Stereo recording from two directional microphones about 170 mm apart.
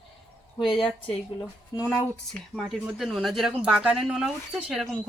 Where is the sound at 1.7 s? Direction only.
20° left (ahead or behind).